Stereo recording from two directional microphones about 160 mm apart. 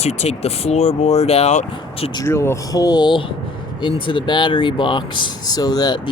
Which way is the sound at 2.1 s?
15° left (ahead or behind).